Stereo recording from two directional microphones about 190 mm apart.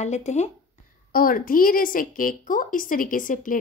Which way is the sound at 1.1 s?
50° left (ahead or behind).